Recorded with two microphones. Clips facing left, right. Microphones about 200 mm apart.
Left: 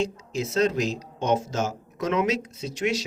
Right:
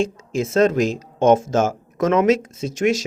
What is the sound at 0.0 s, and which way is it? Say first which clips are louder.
Speech: right 6 dB; 50° right (ahead or behind).